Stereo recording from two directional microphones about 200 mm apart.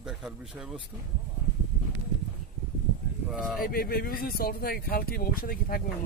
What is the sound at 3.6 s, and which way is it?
Speech, 45° left (ahead or behind).